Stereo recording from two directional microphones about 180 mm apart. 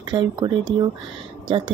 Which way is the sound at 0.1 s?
25° right (ahead or behind).